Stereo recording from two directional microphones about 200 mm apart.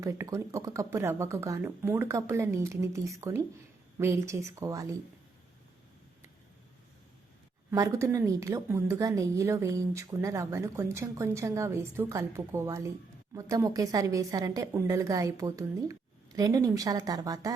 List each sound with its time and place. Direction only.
0.0 s a woman's voice: 15° right (ahead or behind)
7.7 s a woman's voice: 15° right (ahead or behind)